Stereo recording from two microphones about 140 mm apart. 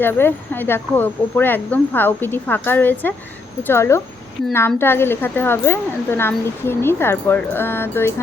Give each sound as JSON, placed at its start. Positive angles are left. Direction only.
{"t": 0.0, "sound": "speech", "side_deg": 15}